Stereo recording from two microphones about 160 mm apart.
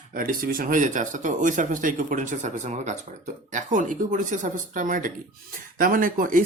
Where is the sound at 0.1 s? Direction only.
60° right (ahead or behind).